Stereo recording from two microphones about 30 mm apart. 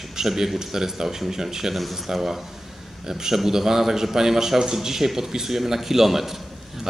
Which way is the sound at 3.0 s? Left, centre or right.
Centre.